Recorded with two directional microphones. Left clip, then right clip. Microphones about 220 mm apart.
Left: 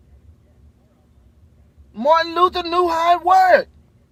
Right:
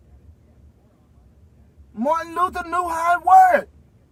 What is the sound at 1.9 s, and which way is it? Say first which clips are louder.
A man's voice: left 6 dB; 30° left (ahead or behind).